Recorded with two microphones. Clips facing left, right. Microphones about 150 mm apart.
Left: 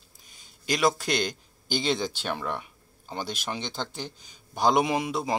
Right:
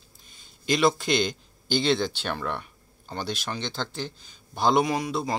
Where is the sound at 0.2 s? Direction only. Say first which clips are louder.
Right 1 dB; 10° left (ahead or behind).